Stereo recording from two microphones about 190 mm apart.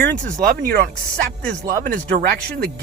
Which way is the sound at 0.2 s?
45° right (ahead or behind).